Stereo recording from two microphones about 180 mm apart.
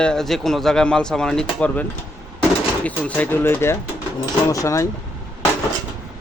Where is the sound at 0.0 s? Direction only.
5° left (ahead or behind).